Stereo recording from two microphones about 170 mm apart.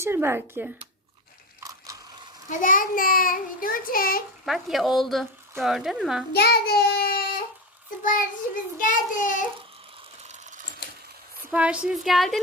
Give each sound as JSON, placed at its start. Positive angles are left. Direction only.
{"t": 0.0, "sound": "speech", "side_deg": -15}
{"t": 2.5, "sound": "a child's voice", "side_deg": 50}
{"t": 4.4, "sound": "speech", "side_deg": 0}
{"t": 6.3, "sound": "a child's voice", "side_deg": 65}
{"t": 7.9, "sound": "a child's voice", "side_deg": 55}
{"t": 10.2, "sound": "a sound", "side_deg": -45}
{"t": 10.8, "sound": "a sound", "side_deg": 70}
{"t": 11.5, "sound": "speech", "side_deg": -10}